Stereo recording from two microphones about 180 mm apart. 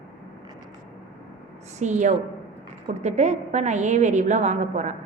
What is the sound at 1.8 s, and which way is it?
A woman's voice, 40° right (ahead or behind).